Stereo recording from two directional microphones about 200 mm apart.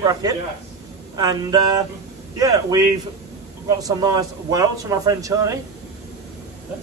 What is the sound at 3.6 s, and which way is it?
Speech, 15° right (ahead or behind).